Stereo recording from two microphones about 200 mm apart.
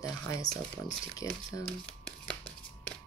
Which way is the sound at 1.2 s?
25° right (ahead or behind).